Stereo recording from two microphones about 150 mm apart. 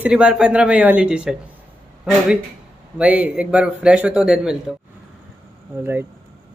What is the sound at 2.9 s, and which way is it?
Speech, 10° right (ahead or behind).